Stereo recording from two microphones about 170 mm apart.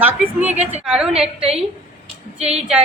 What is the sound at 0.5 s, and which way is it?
Speech, 40° right (ahead or behind).